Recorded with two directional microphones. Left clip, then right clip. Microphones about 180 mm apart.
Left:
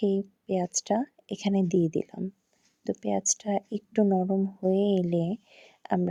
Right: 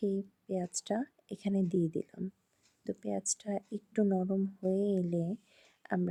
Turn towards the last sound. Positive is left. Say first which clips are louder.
# left 7 dB
turn(degrees=25)  # may be behind; listen again after turning